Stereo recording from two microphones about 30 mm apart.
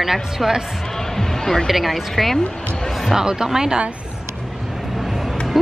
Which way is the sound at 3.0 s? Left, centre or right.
Centre.